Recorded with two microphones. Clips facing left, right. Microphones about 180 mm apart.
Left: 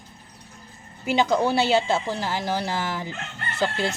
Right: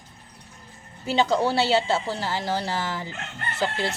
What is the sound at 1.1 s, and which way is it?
Speech, 10° left (ahead or behind).